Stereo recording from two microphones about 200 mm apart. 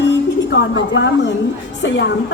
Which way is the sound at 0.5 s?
65° left (ahead or behind).